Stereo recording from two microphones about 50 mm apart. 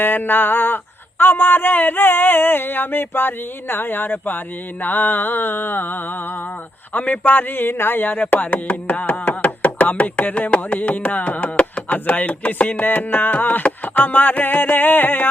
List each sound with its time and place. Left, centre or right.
0.0 s chopping: left
1.2 s a sound: left
4.8 s chopping: left
6.9 s chopping: left